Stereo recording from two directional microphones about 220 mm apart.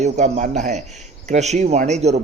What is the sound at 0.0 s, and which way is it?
A man's voice, 35° right (ahead or behind).